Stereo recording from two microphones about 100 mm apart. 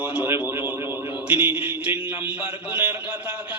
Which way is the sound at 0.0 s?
15° right (ahead or behind).